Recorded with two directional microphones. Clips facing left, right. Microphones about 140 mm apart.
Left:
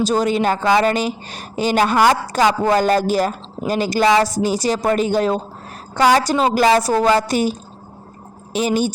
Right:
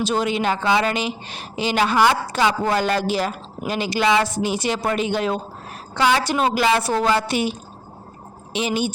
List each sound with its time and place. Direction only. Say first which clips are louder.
0.0 s a woman's voice: left 4 dB; 40° left (ahead or behind)
8.5 s speech: left 4 dB; 40° left (ahead or behind)